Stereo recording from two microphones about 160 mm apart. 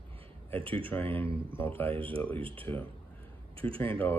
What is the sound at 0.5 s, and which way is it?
Speech, 35° right (ahead or behind).